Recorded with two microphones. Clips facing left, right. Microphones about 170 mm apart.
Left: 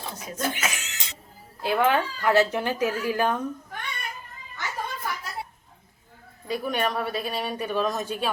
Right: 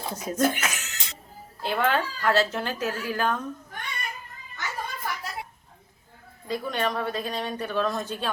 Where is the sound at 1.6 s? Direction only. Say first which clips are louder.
Left 3 dB; 10° left (ahead or behind).